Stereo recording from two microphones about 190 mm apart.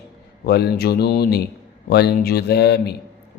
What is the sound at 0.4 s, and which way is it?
Speech, 60° left (ahead or behind).